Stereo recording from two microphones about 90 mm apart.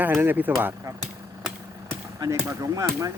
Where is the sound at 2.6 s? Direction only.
40° right (ahead or behind).